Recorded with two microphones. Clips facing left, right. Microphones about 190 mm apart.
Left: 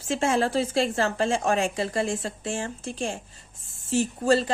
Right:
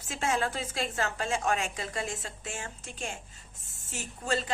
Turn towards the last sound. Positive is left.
turn(degrees=35)  # may be behind; listen again after turning